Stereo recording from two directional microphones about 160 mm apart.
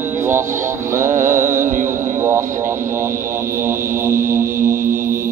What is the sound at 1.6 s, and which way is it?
Music, 55° right (ahead or behind).